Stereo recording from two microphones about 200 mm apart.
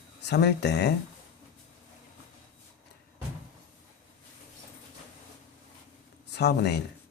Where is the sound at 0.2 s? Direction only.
55° left (ahead or behind).